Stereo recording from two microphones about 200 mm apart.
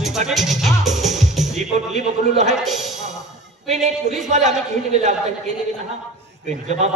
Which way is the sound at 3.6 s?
35° right (ahead or behind).